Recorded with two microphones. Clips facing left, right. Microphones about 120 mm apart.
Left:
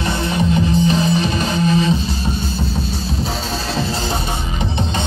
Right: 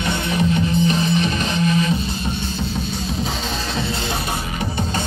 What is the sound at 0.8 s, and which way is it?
Music, 35° left (ahead or behind).